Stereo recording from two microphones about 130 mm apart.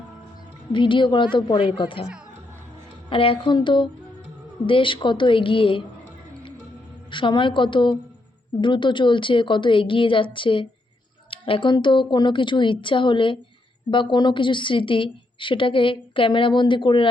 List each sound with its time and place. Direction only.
0.7 s a woman's voice: 40° left (ahead or behind)
3.1 s a woman's voice: 45° left (ahead or behind)
7.1 s a woman's voice: 40° left (ahead or behind)